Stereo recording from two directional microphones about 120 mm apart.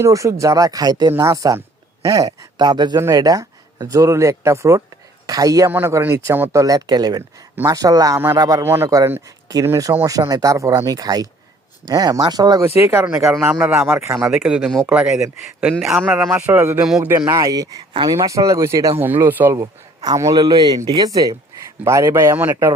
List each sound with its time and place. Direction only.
0.0 s a man's voice: 25° right (ahead or behind)
7.2 s a man's voice: 20° right (ahead or behind)
12.6 s speech: 20° right (ahead or behind)
13.5 s speech: 10° right (ahead or behind)
13.7 s speech: 20° right (ahead or behind)
14.3 s speech: 5° right (ahead or behind)
17.2 s speech: 30° right (ahead or behind)
19.0 s a man's voice: 15° right (ahead or behind)